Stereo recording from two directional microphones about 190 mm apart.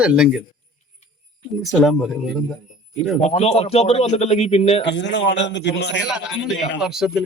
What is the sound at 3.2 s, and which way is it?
Speech, 35° left (ahead or behind).